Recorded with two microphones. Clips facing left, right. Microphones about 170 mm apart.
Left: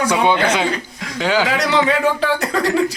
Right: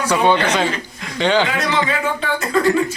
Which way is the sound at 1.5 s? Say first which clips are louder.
Left 3 dB; 75° left (ahead or behind).